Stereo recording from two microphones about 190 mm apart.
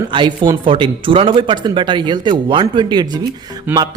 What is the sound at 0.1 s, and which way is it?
Speech, 25° right (ahead or behind).